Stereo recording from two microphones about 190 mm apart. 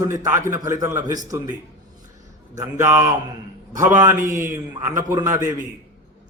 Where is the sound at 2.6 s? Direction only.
15° right (ahead or behind).